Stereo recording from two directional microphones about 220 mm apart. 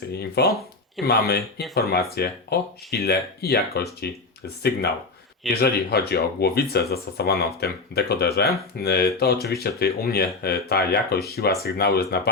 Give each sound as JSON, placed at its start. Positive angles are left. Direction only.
{"t": 0.1, "sound": "speech", "side_deg": 45}
{"t": 5.5, "sound": "speech", "side_deg": 45}